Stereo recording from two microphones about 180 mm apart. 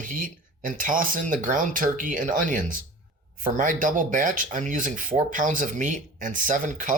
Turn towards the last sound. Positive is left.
turn(degrees=-45)  # may be behind; listen again after turning